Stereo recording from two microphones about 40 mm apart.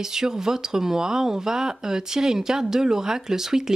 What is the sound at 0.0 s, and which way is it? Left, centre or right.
Speech, centre.